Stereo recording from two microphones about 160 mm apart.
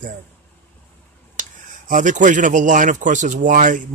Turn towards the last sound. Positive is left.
turn(degrees=-55)  # may be behind; listen again after turning